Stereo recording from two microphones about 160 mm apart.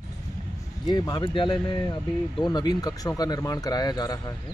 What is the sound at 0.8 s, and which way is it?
Speech, 25° left (ahead or behind).